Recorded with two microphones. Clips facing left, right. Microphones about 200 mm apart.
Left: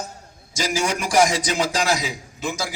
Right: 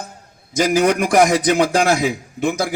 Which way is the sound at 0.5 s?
55° right (ahead or behind).